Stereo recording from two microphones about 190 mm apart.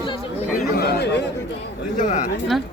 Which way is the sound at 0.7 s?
55° left (ahead or behind).